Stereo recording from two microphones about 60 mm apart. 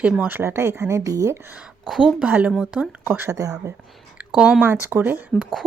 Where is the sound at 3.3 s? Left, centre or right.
Right.